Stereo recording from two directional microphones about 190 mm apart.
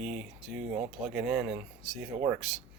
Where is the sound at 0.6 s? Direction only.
35° right (ahead or behind).